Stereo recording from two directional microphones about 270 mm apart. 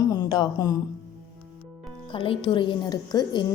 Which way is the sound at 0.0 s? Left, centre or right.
Centre.